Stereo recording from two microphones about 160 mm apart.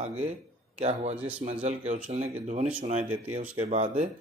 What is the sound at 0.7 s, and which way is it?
Speech, 45° right (ahead or behind).